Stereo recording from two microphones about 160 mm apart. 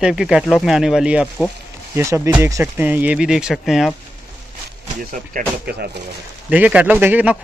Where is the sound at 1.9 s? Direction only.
15° right (ahead or behind); by 3.9 s centre (ahead or behind).